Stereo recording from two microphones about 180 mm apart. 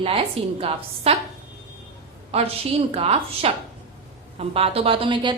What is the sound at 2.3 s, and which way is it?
A woman's voice, 35° right (ahead or behind).